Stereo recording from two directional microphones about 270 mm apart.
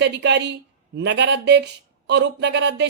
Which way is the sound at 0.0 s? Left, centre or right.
Right.